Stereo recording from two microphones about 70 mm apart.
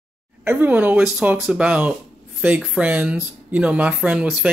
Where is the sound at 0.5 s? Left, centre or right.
Right.